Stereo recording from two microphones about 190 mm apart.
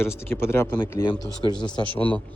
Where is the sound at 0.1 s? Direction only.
15° left (ahead or behind).